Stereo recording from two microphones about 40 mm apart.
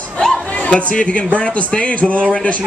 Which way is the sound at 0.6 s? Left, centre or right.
Left.